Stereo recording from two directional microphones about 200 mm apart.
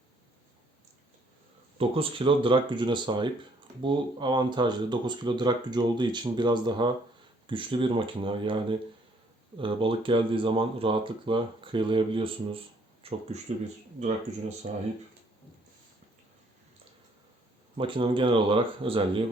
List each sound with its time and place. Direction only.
1.8 s speech: 25° right (ahead or behind)
14.6 s speech: 35° right (ahead or behind)
17.7 s speech: 25° right (ahead or behind)